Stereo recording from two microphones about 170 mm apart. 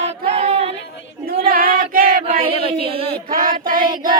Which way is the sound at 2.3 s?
35° right (ahead or behind).